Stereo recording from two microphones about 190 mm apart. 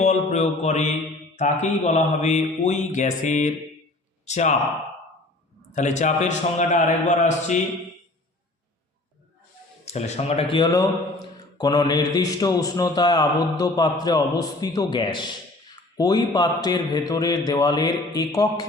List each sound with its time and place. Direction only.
0.0 s mantra: 35° left (ahead or behind)
5.7 s mantra: 40° left (ahead or behind)
9.8 s mantra: 35° left (ahead or behind)
11.5 s a man's voice: 20° left (ahead or behind)